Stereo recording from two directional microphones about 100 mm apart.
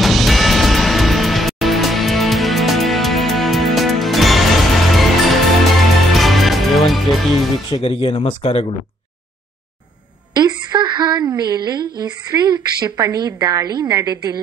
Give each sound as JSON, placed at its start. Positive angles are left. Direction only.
{"t": 0.0, "sound": "music", "side_deg": 0}
{"t": 7.8, "sound": "speech", "side_deg": 70}
{"t": 10.3, "sound": "a woman's voice", "side_deg": -45}